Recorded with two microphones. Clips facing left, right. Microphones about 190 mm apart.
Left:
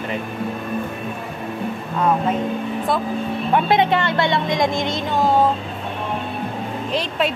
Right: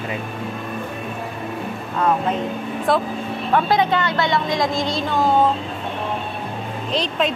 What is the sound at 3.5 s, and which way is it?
Speech, 25° left (ahead or behind).